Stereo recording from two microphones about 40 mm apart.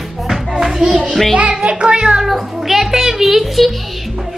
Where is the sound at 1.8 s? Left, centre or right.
Right.